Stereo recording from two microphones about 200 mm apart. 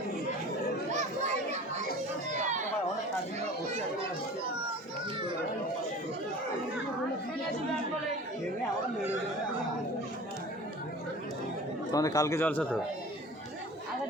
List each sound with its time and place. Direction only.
0.9 s children playing: 35° right (ahead or behind)
11.9 s speech: 15° left (ahead or behind)